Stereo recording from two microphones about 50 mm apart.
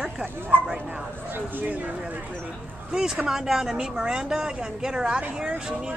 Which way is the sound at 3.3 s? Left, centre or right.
Centre.